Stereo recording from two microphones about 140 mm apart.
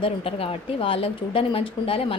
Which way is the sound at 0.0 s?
40° left (ahead or behind).